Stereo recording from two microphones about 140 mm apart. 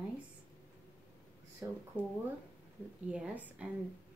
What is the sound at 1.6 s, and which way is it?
Speech, 20° right (ahead or behind).